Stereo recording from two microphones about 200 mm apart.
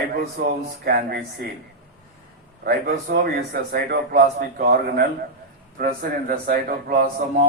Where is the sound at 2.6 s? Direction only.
55° right (ahead or behind).